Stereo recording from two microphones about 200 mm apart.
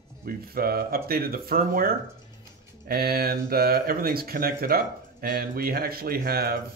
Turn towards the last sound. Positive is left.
turn(degrees=-50)  # may be behind; listen again after turning